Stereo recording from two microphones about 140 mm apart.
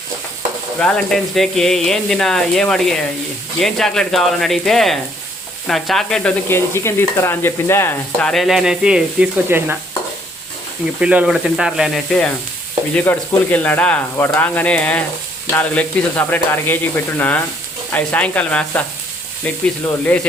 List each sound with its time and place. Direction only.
0.8 s speech: 5° left (ahead or behind)
6.5 s speech: 20° left (ahead or behind)
8.3 s speech: centre (ahead or behind)
11.0 s speech: 10° right (ahead or behind); by 20.2 s 10° left (ahead or behind)